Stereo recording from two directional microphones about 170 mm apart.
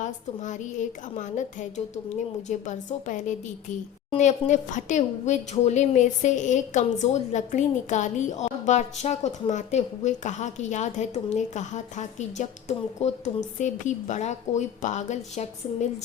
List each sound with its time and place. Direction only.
0.0 s speech: 45° left (ahead or behind)